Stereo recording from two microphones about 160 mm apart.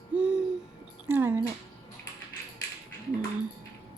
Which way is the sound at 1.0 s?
15° right (ahead or behind).